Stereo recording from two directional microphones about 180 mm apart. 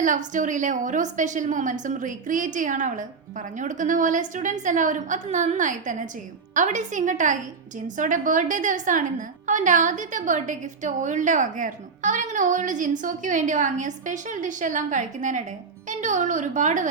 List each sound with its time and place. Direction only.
0.0 s a woman's voice: 45° right (ahead or behind)